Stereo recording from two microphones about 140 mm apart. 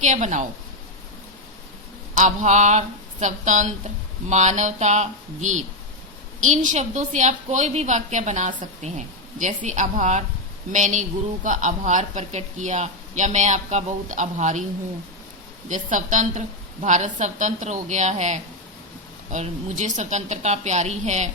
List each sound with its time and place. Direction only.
0.0 s speech: 60° right (ahead or behind)
2.1 s speech: 60° right (ahead or behind)
15.7 s speech: 65° right (ahead or behind)